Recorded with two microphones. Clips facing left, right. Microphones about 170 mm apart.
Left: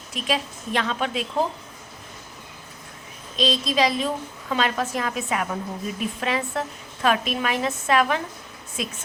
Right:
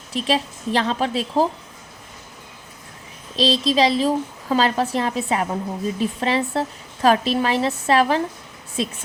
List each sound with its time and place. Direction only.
0.1 s a woman's voice: 30° right (ahead or behind)
3.3 s a woman's voice: 30° right (ahead or behind)